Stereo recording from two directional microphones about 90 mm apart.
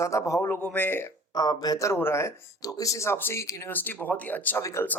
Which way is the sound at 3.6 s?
20° left (ahead or behind).